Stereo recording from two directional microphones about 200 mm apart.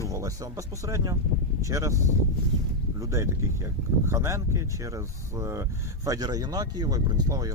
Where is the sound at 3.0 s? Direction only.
15° right (ahead or behind).